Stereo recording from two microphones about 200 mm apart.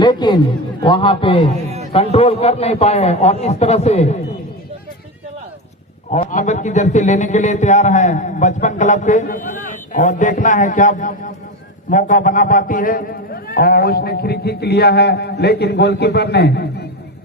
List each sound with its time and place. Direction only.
0.0 s a man's voice: 20° left (ahead or behind)
6.1 s a man's voice: 35° left (ahead or behind); by 16.6 s 55° left (ahead or behind)